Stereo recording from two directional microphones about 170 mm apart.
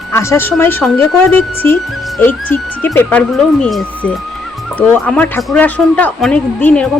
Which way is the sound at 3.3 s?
Centre (ahead or behind).